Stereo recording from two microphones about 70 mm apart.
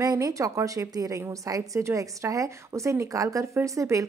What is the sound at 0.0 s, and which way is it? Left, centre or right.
A woman's voice, right.